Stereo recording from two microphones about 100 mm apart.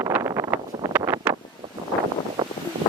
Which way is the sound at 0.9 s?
25° right (ahead or behind).